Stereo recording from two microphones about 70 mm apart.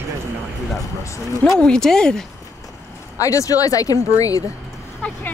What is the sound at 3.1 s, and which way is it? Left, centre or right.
Speech, left.